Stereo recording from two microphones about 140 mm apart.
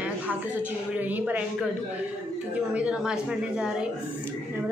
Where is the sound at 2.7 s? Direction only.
10° right (ahead or behind).